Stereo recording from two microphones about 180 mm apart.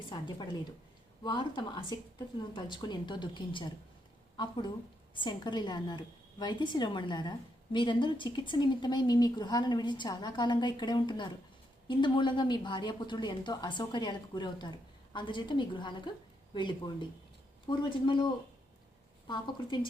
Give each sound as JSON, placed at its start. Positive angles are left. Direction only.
{"t": 0.1, "sound": "a woman's voice", "side_deg": 25}
{"t": 19.3, "sound": "a woman's voice", "side_deg": 25}